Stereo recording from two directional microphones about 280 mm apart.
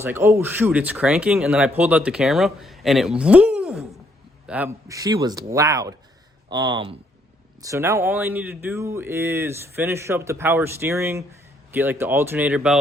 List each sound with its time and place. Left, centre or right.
0.0 s speech: centre